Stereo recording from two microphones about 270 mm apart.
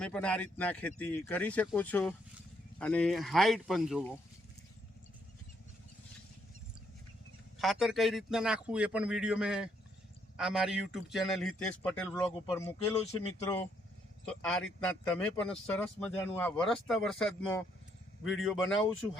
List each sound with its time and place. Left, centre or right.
0.0 s speech: centre
7.6 s speech: centre
12.3 s speech: centre
14.3 s speech: centre